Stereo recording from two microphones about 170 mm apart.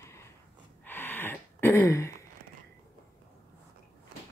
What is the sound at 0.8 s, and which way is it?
Gasp, 10° left (ahead or behind).